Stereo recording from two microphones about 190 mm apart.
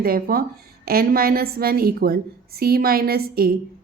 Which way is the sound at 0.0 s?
50° right (ahead or behind).